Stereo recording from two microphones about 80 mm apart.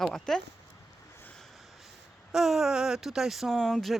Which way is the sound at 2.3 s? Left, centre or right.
Centre.